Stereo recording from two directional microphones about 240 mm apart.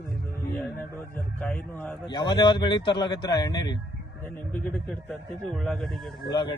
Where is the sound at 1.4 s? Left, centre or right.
Centre.